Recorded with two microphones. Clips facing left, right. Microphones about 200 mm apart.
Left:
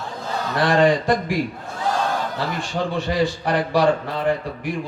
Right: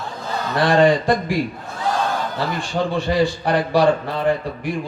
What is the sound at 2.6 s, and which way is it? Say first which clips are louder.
A man's voice: right 3 dB; 30° right (ahead or behind).